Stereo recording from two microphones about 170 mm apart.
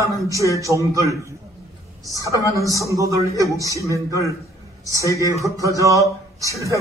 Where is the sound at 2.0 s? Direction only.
20° right (ahead or behind).